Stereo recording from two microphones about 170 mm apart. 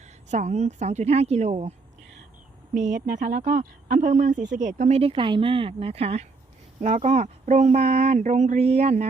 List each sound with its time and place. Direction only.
0.3 s speech: 40° right (ahead or behind)
2.7 s speech: 45° right (ahead or behind)